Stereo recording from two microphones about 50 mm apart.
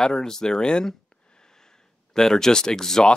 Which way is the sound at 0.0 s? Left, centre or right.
Centre.